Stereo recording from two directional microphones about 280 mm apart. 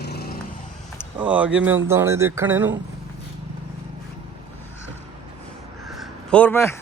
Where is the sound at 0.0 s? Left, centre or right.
Left.